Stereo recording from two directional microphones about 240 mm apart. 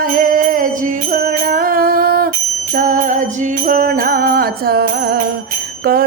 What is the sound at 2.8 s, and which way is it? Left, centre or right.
Jingle bell, right.